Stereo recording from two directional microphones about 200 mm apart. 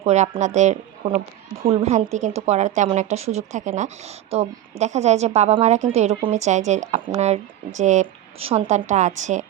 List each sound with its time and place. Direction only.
0.0 s a woman's voice: 35° right (ahead or behind)